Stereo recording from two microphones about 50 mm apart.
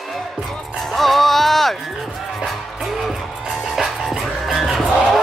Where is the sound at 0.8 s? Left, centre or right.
Centre.